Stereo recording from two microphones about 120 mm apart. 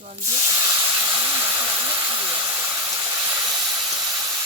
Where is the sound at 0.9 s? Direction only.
20° right (ahead or behind).